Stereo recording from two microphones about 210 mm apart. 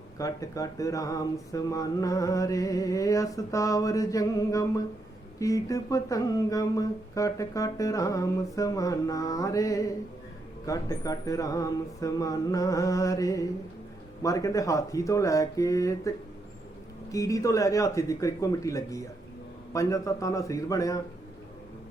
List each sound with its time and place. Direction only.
0.2 s speech: 15° left (ahead or behind)